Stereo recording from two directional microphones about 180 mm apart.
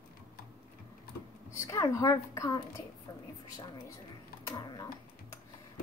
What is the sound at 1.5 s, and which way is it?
A woman's voice, 20° left (ahead or behind).